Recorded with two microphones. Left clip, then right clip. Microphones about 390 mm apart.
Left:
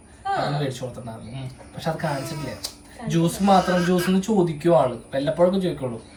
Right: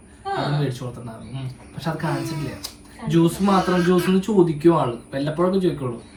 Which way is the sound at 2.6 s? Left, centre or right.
Centre.